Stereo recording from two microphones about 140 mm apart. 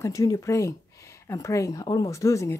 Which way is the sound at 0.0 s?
25° left (ahead or behind).